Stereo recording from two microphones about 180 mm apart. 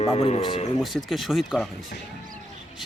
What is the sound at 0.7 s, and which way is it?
Speech, centre (ahead or behind).